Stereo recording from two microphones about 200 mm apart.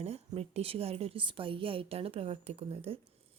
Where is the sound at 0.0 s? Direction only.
30° right (ahead or behind).